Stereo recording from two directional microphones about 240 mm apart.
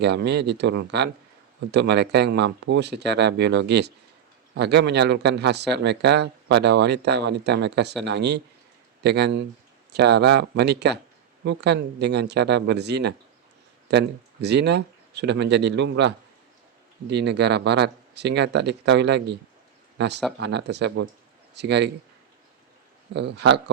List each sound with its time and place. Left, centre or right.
0.0 s speech: right
20.4 s speech: right
23.1 s speech: right